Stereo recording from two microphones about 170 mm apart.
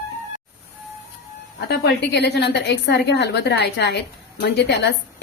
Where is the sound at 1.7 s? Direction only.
85° left.